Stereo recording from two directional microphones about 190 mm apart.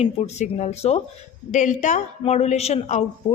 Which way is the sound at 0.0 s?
35° left (ahead or behind).